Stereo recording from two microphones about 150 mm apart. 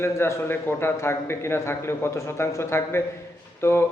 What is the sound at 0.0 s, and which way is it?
Speech, 15° left (ahead or behind).